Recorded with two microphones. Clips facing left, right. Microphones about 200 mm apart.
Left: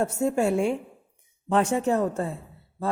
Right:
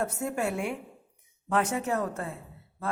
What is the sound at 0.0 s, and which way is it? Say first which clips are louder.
A man's voice: left 6 dB; 30° left (ahead or behind).